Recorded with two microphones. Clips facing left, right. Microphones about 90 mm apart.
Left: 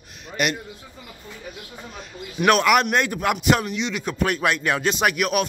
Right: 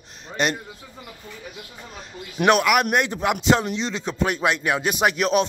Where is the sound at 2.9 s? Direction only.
20° right (ahead or behind).